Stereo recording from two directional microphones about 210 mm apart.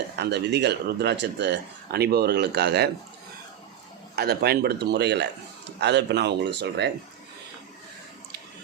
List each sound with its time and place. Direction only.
0.2 s speech: 55° right (ahead or behind)
4.1 s speech: 50° right (ahead or behind)